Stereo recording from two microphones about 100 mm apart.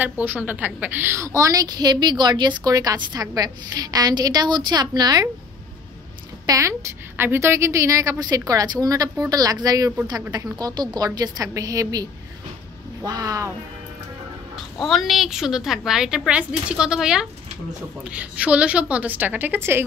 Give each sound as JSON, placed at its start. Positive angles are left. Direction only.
{"t": 0.0, "sound": "a woman's voice", "side_deg": -20}
{"t": 6.4, "sound": "a woman's voice", "side_deg": -30}
{"t": 14.8, "sound": "a woman's voice", "side_deg": 0}